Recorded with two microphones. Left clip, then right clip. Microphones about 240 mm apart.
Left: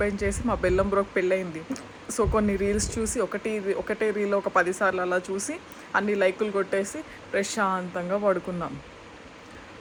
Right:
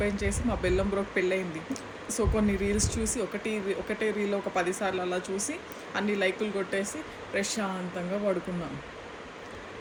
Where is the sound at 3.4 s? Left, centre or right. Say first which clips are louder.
Left 4 dB; left.